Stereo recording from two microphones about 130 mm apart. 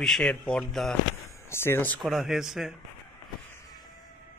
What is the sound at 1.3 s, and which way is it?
Speech, 20° left (ahead or behind).